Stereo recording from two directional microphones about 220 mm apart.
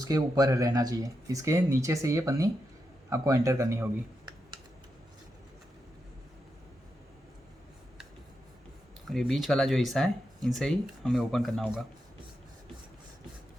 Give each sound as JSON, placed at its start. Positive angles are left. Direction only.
{"t": 0.0, "sound": "speech", "side_deg": -15}
{"t": 9.0, "sound": "speech", "side_deg": 0}